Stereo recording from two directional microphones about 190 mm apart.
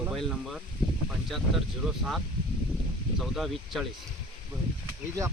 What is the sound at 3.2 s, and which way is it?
Speech, centre (ahead or behind).